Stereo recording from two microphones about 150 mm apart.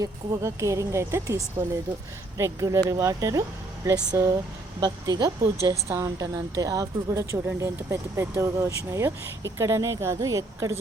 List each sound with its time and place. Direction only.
0.0 s a woman's voice: 20° right (ahead or behind)
2.4 s a woman's voice: 20° right (ahead or behind)